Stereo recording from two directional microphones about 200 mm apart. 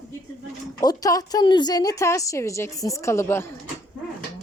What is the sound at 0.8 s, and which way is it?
A woman's voice, 20° left (ahead or behind).